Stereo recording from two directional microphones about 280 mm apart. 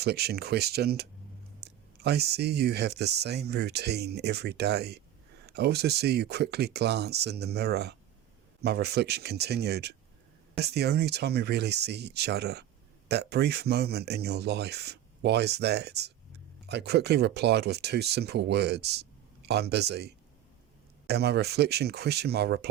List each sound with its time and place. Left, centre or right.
0.0 s speech: right